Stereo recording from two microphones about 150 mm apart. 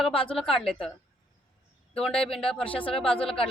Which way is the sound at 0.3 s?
Centre (ahead or behind).